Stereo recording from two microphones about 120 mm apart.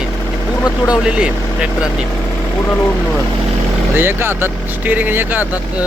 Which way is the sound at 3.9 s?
20° right (ahead or behind).